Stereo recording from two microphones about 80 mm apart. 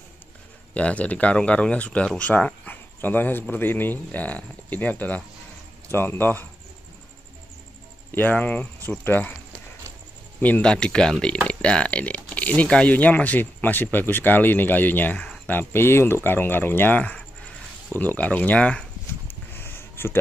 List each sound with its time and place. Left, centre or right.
0.7 s speech: centre
8.1 s speech: left
10.4 s speech: left
10.7 s speech: centre
19.5 s a sound: left